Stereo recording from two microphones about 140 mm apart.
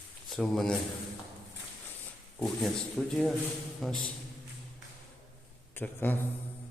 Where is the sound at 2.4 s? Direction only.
5° left (ahead or behind).